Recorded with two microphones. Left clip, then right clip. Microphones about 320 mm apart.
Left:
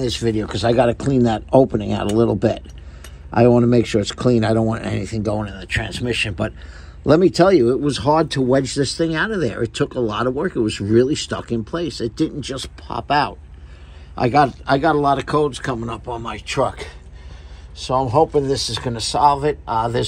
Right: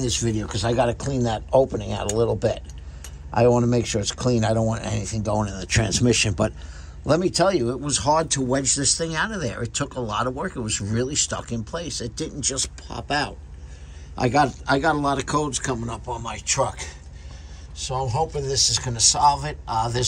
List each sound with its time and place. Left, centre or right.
0.0 s speech: centre
7.1 s speech: centre
10.3 s speech: left
10.7 s speech: centre